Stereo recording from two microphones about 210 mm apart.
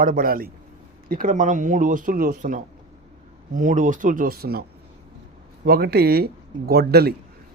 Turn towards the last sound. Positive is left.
turn(degrees=-50)  # may be behind; listen again after turning